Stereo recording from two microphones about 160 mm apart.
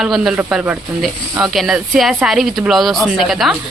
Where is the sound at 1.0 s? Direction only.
Centre (ahead or behind).